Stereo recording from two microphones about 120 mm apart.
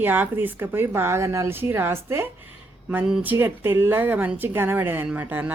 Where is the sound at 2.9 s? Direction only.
10° right (ahead or behind).